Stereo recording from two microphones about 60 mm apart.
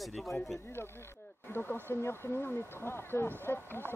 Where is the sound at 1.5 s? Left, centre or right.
Left.